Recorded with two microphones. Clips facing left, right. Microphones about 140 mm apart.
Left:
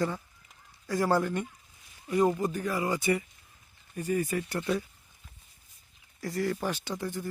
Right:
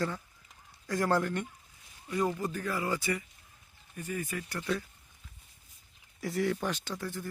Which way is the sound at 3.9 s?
35° left (ahead or behind).